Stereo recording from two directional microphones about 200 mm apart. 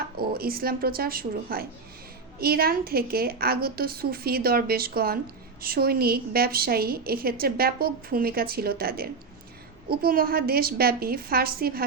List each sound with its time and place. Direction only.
0.2 s a woman's voice: 50° right (ahead or behind)